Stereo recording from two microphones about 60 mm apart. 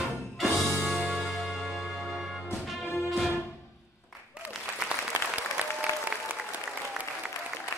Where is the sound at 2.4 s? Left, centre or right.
Left.